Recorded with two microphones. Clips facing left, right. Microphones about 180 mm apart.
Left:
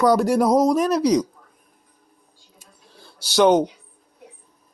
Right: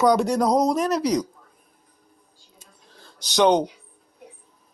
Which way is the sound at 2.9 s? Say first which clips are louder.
Left 3 dB; 10° left (ahead or behind).